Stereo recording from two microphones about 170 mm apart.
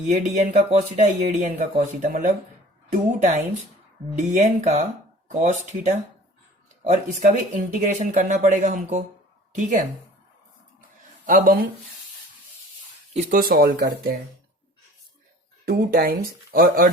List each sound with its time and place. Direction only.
0.1 s speech: 40° right (ahead or behind)
11.3 s speech: 55° right (ahead or behind)
13.1 s speech: 40° right (ahead or behind)
13.4 s speech: 60° right (ahead or behind)
15.6 s speech: 65° right (ahead or behind)